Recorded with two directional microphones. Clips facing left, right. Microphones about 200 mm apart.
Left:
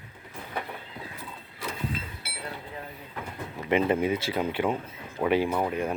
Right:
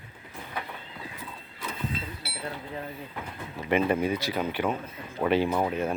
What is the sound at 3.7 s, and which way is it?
Speech, 20° left (ahead or behind).